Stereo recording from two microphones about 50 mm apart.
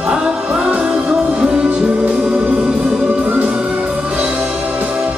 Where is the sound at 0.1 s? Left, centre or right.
Centre.